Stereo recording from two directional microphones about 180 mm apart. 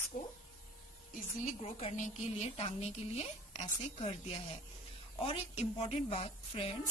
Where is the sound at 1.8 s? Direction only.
40° left (ahead or behind).